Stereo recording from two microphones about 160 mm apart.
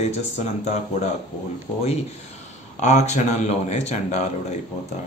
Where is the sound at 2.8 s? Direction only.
45° left (ahead or behind).